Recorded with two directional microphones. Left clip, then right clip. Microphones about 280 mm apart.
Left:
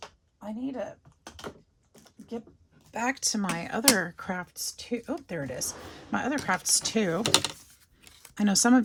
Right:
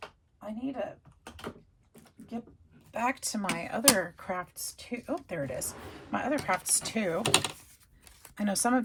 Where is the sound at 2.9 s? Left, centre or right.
Left.